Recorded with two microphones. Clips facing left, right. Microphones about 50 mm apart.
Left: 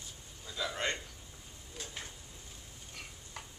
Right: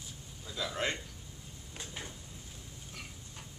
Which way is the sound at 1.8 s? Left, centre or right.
Centre.